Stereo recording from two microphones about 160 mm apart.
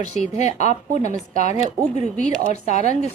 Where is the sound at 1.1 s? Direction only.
55° right (ahead or behind).